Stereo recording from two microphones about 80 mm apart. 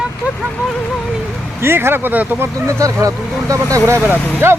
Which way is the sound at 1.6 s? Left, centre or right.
Right.